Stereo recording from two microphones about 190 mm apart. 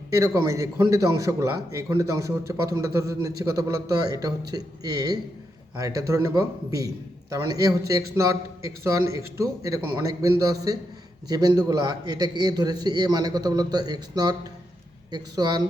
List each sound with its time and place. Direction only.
0.1 s a man's voice: 15° right (ahead or behind)